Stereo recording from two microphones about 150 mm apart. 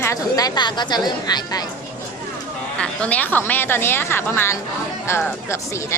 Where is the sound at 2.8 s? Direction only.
10° left (ahead or behind).